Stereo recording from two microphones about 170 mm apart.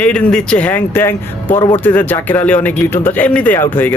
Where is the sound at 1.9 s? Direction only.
10° left (ahead or behind).